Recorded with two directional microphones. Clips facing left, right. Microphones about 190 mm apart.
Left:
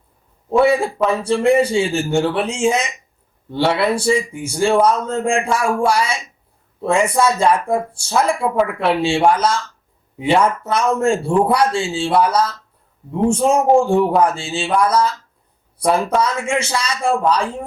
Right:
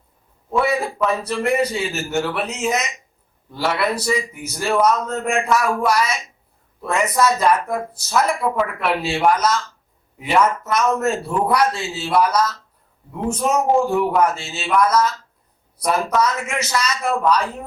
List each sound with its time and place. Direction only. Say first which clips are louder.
0.5 s speech: left 6 dB; 30° left (ahead or behind)